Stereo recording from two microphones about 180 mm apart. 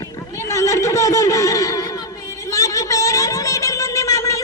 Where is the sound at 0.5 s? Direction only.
15° left (ahead or behind).